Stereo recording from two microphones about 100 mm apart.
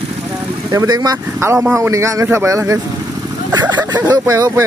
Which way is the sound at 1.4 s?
30° right (ahead or behind).